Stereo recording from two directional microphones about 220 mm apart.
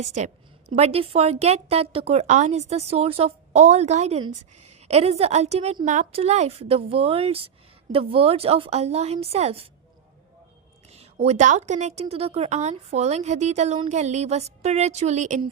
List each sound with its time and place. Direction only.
0.2 s a woman's voice: 30° right (ahead or behind)
10.9 s a woman's voice: 30° right (ahead or behind)